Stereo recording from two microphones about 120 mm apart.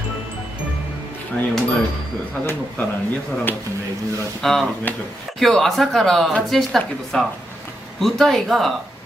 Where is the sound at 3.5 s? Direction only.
15° left (ahead or behind).